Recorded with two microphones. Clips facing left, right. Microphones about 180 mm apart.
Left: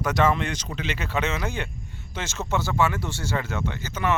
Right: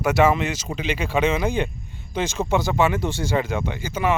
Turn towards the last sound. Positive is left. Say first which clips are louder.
# right 3 dB
turn(degrees=-10)  # may be behind; listen again after turning